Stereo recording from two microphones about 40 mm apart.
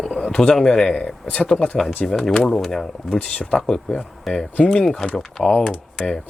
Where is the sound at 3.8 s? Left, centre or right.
Centre.